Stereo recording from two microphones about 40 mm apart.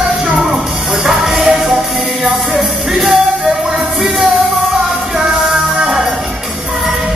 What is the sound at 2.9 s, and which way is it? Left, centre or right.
Music, centre.